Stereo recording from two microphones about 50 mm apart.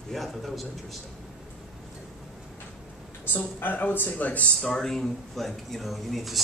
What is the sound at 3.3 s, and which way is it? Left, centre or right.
Speech, left.